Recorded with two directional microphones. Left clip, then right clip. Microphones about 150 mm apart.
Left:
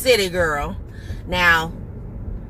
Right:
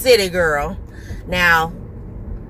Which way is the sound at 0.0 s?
25° right (ahead or behind).